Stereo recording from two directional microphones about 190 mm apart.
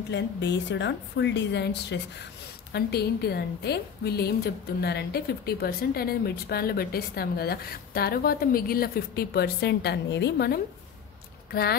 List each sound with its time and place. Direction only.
0.1 s a woman's voice: 65° left (ahead or behind)